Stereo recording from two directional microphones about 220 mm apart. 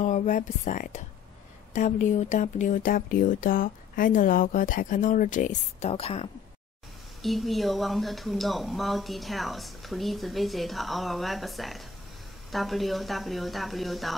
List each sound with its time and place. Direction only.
0.0 s speech: 30° left (ahead or behind)
7.2 s speech: centre (ahead or behind)